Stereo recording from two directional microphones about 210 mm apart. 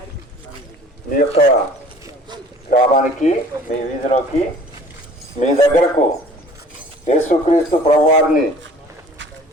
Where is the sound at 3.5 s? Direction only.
15° right (ahead or behind).